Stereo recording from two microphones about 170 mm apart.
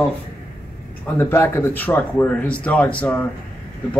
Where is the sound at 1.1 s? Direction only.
15° left (ahead or behind).